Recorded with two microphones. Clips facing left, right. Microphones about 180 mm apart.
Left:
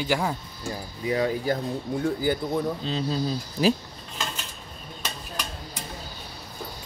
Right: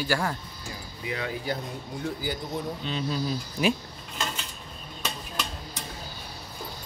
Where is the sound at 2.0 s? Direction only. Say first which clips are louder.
Left 6 dB; 55° left (ahead or behind).